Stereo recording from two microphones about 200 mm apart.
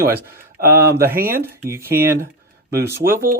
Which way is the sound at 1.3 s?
10° right (ahead or behind).